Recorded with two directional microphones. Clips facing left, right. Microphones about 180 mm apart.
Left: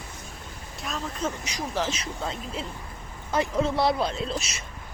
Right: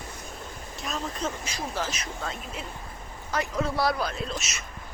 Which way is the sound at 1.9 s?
30° left (ahead or behind).